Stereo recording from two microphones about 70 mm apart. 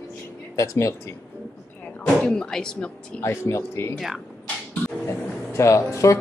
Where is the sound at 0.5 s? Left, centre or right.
Left.